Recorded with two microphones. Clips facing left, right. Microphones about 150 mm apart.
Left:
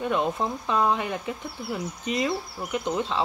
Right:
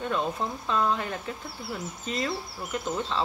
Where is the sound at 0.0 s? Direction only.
15° left (ahead or behind).